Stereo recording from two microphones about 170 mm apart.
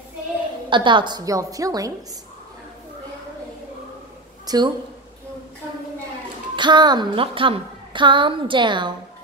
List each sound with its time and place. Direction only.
0.7 s a woman's voice: 30° right (ahead or behind)
4.5 s a woman's voice: 25° right (ahead or behind)
6.5 s a woman's voice: 25° right (ahead or behind)